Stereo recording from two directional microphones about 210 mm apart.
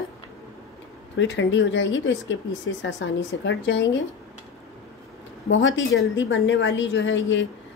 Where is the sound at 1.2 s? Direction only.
60° left (ahead or behind).